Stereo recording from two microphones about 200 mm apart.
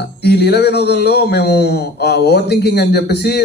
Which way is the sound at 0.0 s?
55° left (ahead or behind).